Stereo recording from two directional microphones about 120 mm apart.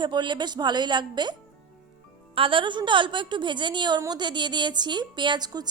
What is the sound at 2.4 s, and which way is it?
A woman's voice, 45° right (ahead or behind).